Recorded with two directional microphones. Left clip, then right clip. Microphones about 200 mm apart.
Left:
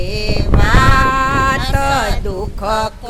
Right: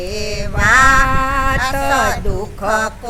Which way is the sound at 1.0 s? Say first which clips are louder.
Left 3 dB; 5° left (ahead or behind).